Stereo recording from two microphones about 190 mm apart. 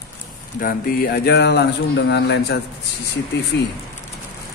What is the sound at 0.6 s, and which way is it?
Speech, 50° left (ahead or behind).